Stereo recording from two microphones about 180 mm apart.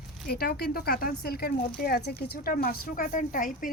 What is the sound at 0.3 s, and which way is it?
Speech, 60° left (ahead or behind).